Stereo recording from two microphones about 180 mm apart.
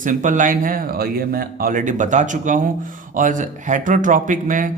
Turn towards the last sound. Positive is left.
turn(degrees=-45)  # may be behind; listen again after turning